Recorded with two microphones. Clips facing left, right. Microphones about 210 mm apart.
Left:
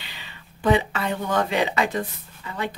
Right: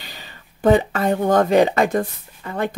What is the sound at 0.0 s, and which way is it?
Speech, 40° right (ahead or behind).